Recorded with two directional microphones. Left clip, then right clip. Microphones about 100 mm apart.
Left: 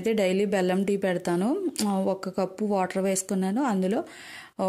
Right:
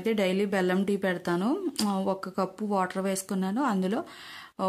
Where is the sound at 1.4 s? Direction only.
25° left (ahead or behind).